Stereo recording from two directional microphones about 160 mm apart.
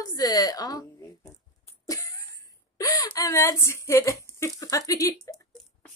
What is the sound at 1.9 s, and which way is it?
Cough, 20° left (ahead or behind).